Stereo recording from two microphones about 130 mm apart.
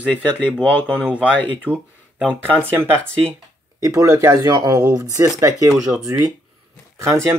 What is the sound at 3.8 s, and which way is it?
Speech, 25° right (ahead or behind).